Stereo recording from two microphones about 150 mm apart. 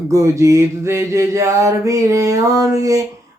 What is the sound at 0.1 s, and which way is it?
Mantra, 20° right (ahead or behind).